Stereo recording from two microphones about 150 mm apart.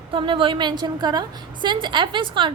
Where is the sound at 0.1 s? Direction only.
35° right (ahead or behind).